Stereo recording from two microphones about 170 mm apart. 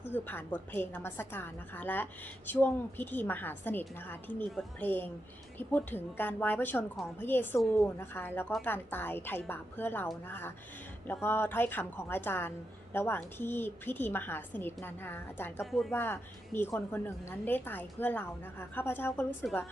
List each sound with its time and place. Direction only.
0.0 s a woman's voice: 10° left (ahead or behind)
15.6 s speech: centre (ahead or behind)
15.9 s a woman's voice: 15° left (ahead or behind)